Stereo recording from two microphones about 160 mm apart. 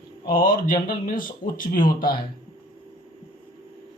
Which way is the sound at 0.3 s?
60° left (ahead or behind).